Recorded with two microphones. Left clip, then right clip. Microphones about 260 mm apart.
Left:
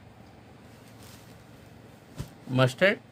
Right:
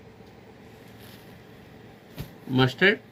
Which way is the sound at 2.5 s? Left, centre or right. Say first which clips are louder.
Right 2 dB; left.